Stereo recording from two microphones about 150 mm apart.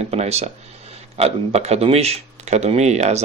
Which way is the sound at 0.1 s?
45° right (ahead or behind).